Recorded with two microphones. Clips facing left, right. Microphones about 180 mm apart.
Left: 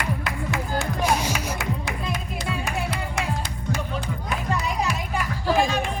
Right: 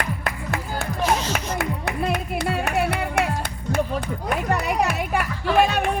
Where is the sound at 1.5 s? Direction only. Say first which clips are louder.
Right 4 dB; 60° right (ahead or behind).